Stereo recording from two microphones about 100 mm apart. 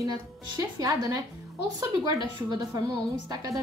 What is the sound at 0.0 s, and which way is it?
A woman's voice, 40° right (ahead or behind).